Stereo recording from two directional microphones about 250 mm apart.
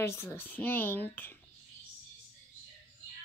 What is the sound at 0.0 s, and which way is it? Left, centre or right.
Speech, centre.